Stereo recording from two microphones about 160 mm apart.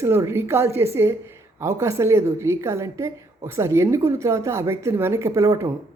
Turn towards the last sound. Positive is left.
turn(degrees=-20)  # may be behind; listen again after turning